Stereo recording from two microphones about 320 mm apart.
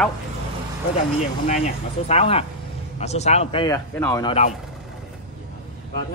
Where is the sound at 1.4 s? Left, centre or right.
Left.